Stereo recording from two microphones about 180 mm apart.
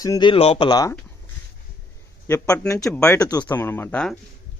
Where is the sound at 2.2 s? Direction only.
15° left (ahead or behind).